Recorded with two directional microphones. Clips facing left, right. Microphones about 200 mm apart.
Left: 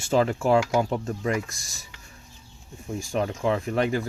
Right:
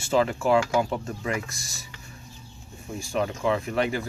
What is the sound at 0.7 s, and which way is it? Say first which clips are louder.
Speech: left 1 dB; 20° left (ahead or behind).